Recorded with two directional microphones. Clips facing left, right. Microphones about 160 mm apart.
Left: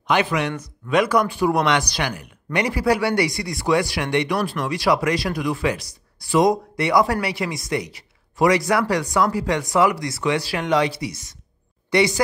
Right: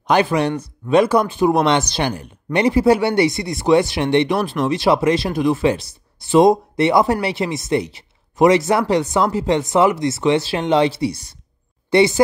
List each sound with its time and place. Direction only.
0.0 s speech: 35° right (ahead or behind)